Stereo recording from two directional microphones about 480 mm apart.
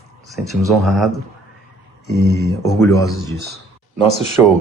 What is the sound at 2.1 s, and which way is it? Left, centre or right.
Speech, centre.